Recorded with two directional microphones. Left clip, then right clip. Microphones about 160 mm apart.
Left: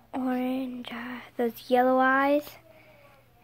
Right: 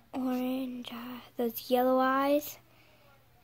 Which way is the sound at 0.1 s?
15° right (ahead or behind).